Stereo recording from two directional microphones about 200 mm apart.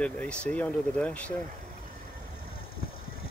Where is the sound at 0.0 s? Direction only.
5° left (ahead or behind).